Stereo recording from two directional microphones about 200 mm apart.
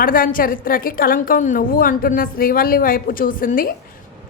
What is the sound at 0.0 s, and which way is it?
A woman's voice, 45° left (ahead or behind).